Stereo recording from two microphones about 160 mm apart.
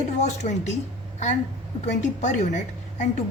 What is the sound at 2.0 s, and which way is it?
A woman's voice, 50° left (ahead or behind).